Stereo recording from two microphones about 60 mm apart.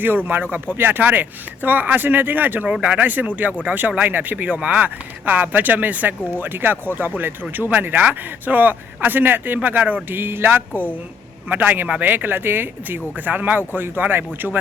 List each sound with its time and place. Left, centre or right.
0.0 s speech: right